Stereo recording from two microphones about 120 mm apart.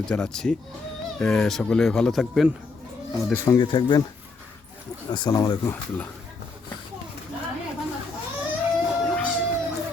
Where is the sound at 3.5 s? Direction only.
35° left (ahead or behind).